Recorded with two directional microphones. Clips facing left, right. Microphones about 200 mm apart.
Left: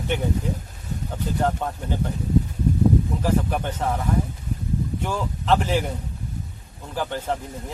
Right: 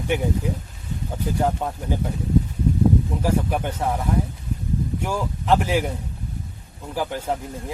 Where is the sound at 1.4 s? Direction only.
10° right (ahead or behind).